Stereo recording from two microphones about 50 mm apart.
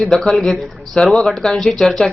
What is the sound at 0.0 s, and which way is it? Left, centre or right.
A woman's voice, centre.